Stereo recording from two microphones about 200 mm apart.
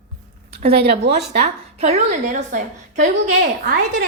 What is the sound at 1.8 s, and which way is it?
A woman's voice, 35° right (ahead or behind).